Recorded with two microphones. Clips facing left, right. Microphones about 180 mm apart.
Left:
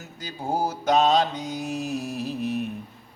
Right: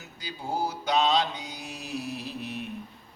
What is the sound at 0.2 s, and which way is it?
Mantra, 45° left (ahead or behind).